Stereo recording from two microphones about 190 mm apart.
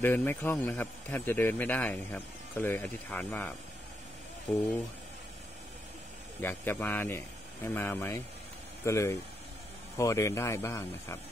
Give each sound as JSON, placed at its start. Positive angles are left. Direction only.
{"t": 0.0, "sound": "a man's voice", "side_deg": 10}
{"t": 6.4, "sound": "a man's voice", "side_deg": 10}